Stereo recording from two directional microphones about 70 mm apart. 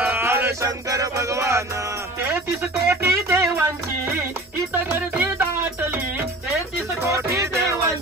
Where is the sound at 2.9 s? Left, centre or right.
Right.